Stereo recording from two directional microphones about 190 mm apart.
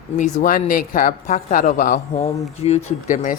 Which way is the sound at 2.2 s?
35° left (ahead or behind).